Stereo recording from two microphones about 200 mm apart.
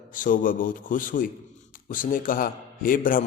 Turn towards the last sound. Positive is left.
turn(degrees=45)  # may be behind; listen again after turning